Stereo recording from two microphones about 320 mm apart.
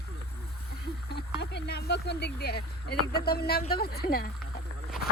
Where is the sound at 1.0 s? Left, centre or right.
Left.